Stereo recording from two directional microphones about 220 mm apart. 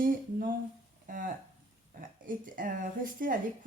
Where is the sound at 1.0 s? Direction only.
40° right (ahead or behind).